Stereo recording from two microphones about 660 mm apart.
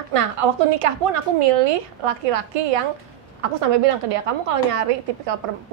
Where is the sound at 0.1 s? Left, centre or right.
Right.